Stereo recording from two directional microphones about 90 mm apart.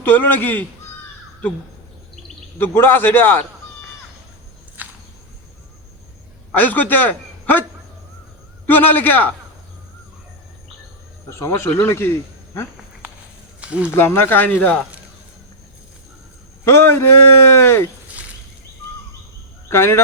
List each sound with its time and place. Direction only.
0.0 s speech: 20° left (ahead or behind)
2.6 s speech: 25° left (ahead or behind)
4.8 s a sound: 20° right (ahead or behind)
6.5 s a man's voice: 20° left (ahead or behind)
8.6 s speech: 20° left (ahead or behind)
11.3 s speech: 30° left (ahead or behind)
13.6 s speech: 10° right (ahead or behind)
13.9 s speech: 25° left (ahead or behind)
16.6 s speech: 25° left (ahead or behind)
18.1 s a sound: 15° right (ahead or behind)
19.7 s speech: 25° left (ahead or behind)